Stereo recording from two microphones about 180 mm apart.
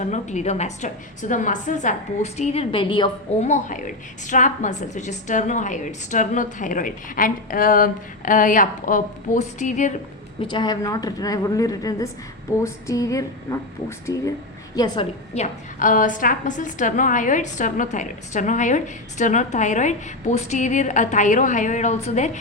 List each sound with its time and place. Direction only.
0.0 s a woman's voice: 40° left (ahead or behind)
3.4 s a woman's voice: 45° left (ahead or behind)
10.4 s a woman's voice: 25° left (ahead or behind)
15.4 s a woman's voice: 45° left (ahead or behind)